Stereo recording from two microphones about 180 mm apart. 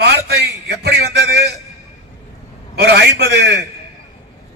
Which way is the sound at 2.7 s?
65° right (ahead or behind).